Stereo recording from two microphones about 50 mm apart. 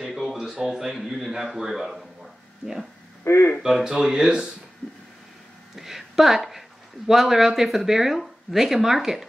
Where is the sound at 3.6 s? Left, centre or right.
Centre.